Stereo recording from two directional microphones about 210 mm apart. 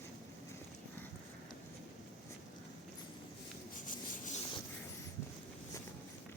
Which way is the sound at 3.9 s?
40° left (ahead or behind).